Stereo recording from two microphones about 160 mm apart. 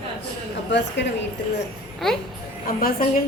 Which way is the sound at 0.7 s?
90° left.